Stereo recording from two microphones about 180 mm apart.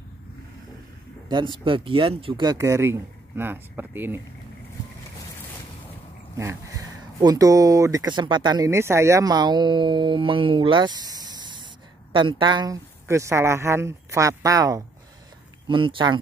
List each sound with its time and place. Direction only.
1.3 s speech: 25° right (ahead or behind)
6.3 s speech: 20° right (ahead or behind)